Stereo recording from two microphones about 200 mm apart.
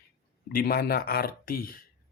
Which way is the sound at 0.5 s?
50° left (ahead or behind).